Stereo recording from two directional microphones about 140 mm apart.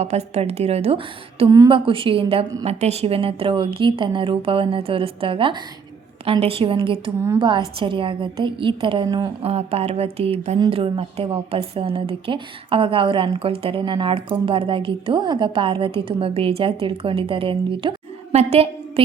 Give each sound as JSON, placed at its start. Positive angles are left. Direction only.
{"t": 0.0, "sound": "a woman's voice", "side_deg": -50}
{"t": 1.5, "sound": "a woman's voice", "side_deg": -25}
{"t": 1.7, "sound": "a woman's voice", "side_deg": -40}
{"t": 9.4, "sound": "a woman's voice", "side_deg": -45}
{"t": 18.3, "sound": "a woman's voice", "side_deg": -50}